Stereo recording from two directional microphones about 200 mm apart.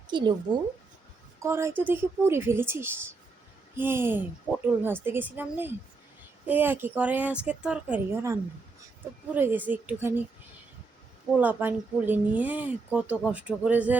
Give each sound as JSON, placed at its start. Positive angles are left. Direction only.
{"t": 0.1, "sound": "speech", "side_deg": -20}
{"t": 1.4, "sound": "speech", "side_deg": -15}
{"t": 11.3, "sound": "speech", "side_deg": -10}